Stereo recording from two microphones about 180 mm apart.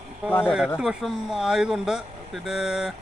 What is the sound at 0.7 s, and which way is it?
Speech, centre (ahead or behind).